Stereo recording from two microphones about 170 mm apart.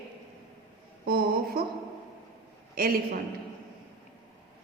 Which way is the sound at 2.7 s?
60° right (ahead or behind).